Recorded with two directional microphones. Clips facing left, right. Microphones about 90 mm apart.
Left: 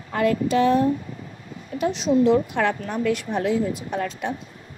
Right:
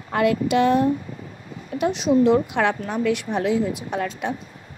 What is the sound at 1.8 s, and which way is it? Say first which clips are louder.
Speech: right 1 dB; 60° right (ahead or behind).